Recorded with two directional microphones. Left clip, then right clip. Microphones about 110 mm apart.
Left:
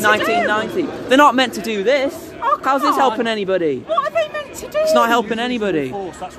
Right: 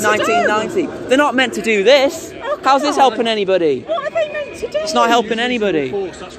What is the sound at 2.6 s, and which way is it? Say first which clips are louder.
Speech: right 5 dB; 20° left (ahead or behind).